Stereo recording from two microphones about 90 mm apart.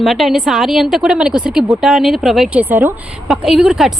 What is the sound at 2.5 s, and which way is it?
Speech, 20° right (ahead or behind).